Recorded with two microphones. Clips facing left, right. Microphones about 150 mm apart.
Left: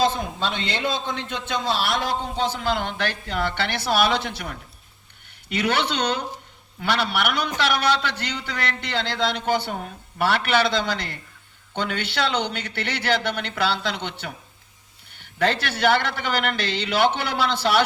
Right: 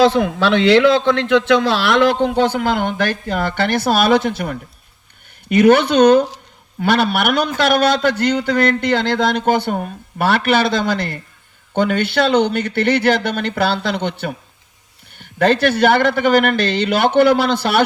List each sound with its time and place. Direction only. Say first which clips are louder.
0.0 s a man's voice: right 9 dB; 85° right; by 17.8 s 50° right (ahead or behind)